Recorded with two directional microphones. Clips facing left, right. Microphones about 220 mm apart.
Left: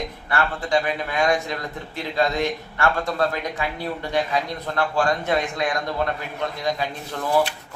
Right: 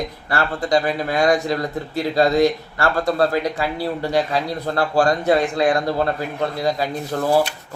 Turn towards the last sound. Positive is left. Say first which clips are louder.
# right 4 dB
turn(degrees=-35)  # may be behind; listen again after turning